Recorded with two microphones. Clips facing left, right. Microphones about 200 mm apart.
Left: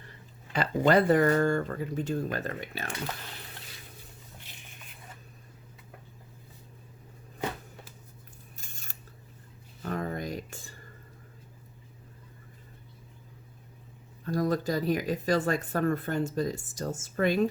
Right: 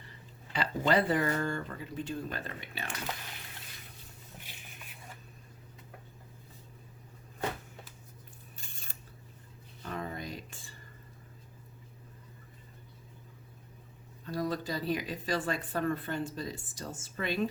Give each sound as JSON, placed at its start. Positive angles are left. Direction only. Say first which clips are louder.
{"t": 0.5, "sound": "speech", "louder": "left 5 dB", "side_deg": 45}
{"t": 8.5, "sound": "scissors", "louder": "left 2 dB", "side_deg": 45}
{"t": 9.8, "sound": "a sound", "louder": "left 6 dB", "side_deg": 45}
{"t": 14.3, "sound": "speech", "louder": "left 6 dB", "side_deg": 45}